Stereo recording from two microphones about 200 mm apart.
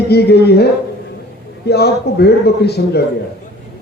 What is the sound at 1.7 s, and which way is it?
A man's voice, 55° left (ahead or behind).